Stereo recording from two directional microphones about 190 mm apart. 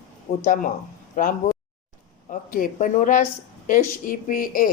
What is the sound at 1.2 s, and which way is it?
Speech, 45° left (ahead or behind).